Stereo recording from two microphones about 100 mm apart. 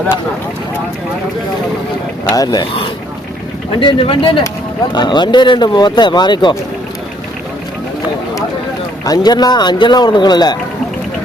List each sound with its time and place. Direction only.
2.3 s speech: 40° left (ahead or behind)
3.7 s speech: 55° left (ahead or behind)
4.9 s speech: 50° left (ahead or behind)
9.0 s speech: 45° left (ahead or behind)